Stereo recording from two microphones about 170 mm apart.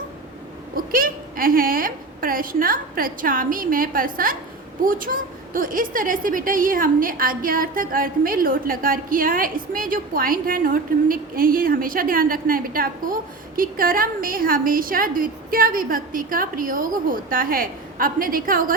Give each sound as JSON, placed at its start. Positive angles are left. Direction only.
{"t": 0.8, "sound": "a woman's voice", "side_deg": -55}